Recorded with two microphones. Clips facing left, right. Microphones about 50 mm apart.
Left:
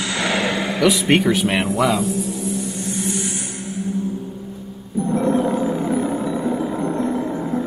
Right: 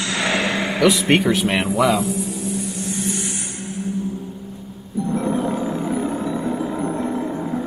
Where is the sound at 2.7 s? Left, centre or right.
Left.